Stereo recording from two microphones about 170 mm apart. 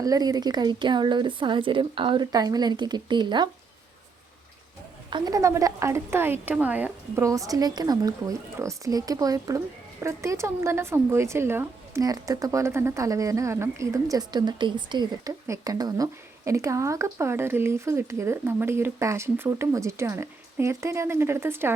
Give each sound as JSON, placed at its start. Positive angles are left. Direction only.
{"t": 0.0, "sound": "a woman's voice", "side_deg": -20}
{"t": 5.1, "sound": "a woman's voice", "side_deg": -20}